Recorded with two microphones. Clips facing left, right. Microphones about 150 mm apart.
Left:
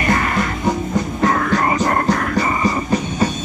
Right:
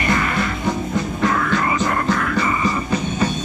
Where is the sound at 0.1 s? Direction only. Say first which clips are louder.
Left 2 dB; 45° left (ahead or behind).